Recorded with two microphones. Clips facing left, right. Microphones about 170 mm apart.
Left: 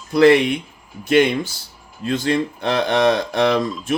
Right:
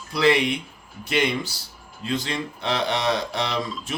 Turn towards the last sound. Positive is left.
turn(degrees=55)  # may be behind; listen again after turning